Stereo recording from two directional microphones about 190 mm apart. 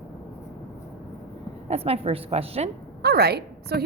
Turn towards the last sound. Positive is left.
turn(degrees=-60)  # may be behind; listen again after turning